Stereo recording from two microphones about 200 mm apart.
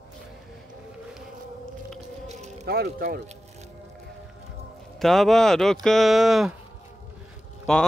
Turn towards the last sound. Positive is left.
turn(degrees=0)  # may be behind; listen again after turning